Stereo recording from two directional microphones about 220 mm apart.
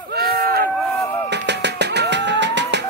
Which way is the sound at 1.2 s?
50° right (ahead or behind).